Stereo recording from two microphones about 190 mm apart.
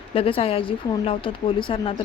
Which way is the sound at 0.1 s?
30° left (ahead or behind).